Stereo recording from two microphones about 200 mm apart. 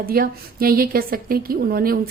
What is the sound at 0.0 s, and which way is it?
A woman's voice, 45° right (ahead or behind).